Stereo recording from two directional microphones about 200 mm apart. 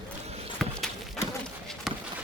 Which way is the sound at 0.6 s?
Centre (ahead or behind).